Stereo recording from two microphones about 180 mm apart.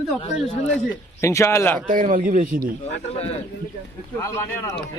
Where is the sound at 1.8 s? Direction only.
50° right (ahead or behind).